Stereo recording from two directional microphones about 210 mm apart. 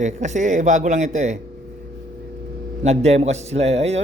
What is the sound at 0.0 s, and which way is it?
A man's voice, 35° right (ahead or behind).